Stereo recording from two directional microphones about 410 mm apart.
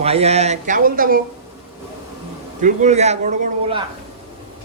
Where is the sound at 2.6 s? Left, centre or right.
Centre.